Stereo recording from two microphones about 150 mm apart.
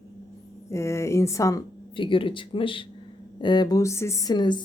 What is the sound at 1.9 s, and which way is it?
Speech, 35° left (ahead or behind).